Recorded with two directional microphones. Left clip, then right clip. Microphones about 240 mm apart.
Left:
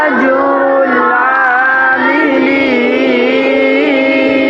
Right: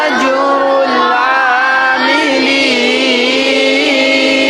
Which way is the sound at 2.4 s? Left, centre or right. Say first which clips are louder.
Even; right.